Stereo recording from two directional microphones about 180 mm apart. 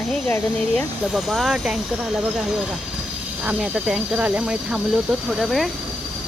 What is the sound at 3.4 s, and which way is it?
Speech, 5° right (ahead or behind).